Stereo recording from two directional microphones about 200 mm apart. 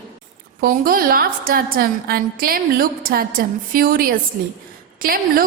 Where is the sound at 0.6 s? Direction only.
45° right (ahead or behind).